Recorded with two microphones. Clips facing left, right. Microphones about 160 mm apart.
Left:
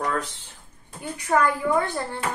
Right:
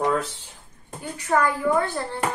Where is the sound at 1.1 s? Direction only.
15° left (ahead or behind).